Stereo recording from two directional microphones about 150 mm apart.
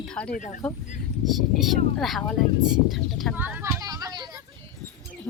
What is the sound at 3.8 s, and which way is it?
Children playing, 25° right (ahead or behind).